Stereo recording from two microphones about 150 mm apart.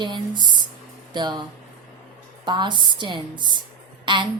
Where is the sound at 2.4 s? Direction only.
30° right (ahead or behind).